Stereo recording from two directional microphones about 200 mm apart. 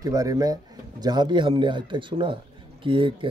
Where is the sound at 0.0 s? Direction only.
15° right (ahead or behind).